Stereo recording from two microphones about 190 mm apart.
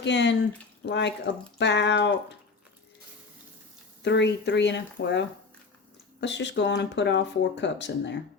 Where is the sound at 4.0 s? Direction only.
65° left (ahead or behind).